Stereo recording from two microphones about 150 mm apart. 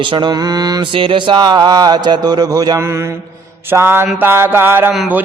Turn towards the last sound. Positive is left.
turn(degrees=-15)  # may be behind; listen again after turning